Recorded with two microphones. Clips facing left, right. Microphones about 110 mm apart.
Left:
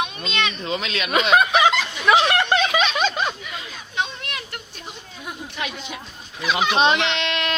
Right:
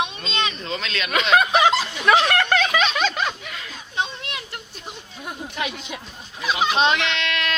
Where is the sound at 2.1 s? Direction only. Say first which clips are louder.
Left 1 dB; 20° left (ahead or behind).